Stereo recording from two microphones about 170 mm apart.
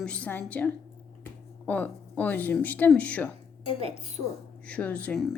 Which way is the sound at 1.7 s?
10° left (ahead or behind).